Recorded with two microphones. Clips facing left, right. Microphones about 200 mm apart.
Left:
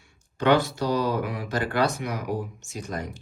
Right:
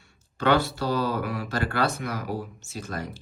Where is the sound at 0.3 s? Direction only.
15° left (ahead or behind).